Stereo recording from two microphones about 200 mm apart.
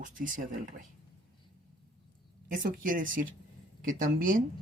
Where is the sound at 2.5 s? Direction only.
45° right (ahead or behind).